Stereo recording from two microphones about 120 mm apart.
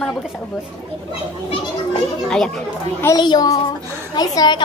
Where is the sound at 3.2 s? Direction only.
35° left (ahead or behind).